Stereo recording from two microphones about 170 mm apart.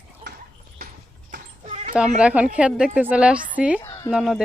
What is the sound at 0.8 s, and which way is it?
Clip-clop, 65° right (ahead or behind).